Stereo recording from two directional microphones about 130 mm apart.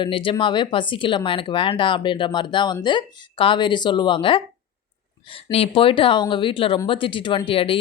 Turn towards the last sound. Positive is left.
turn(degrees=45)  # may be behind; listen again after turning